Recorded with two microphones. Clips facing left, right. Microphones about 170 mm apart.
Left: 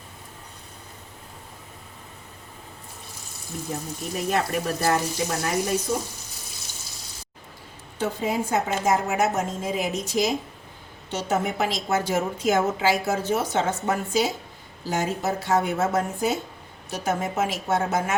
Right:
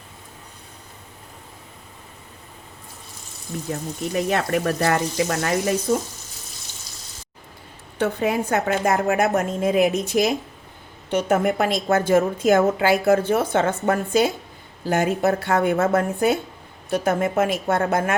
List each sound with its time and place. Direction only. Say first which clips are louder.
4.1 s speech: right 3 dB; 70° right (ahead or behind)
7.9 s a woman's voice: right 4 dB; 65° right (ahead or behind)